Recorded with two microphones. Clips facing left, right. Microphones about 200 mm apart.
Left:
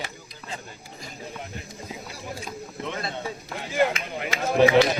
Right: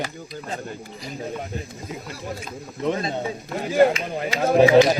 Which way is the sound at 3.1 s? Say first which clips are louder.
Right 6 dB; 40° right (ahead or behind).